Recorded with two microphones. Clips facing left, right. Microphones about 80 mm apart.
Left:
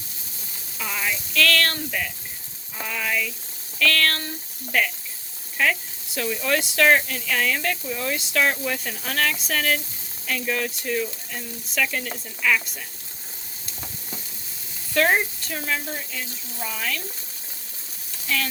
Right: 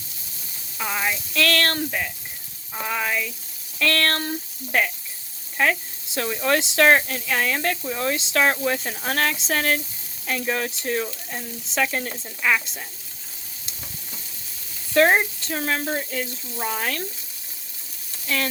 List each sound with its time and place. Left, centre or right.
0.8 s frying: right
1.3 s speech: right
2.8 s speech: right
14.9 s speech: right